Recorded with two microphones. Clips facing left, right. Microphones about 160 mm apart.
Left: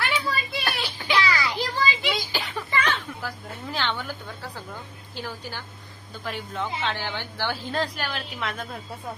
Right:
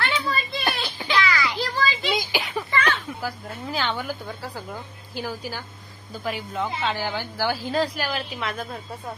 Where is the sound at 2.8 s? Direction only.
5° right (ahead or behind).